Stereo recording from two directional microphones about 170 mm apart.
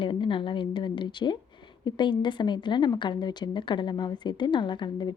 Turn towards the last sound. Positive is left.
turn(degrees=25)  # may be behind; listen again after turning